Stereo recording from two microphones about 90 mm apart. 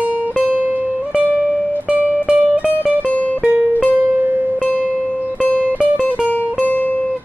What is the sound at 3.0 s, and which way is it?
Music, 15° left (ahead or behind).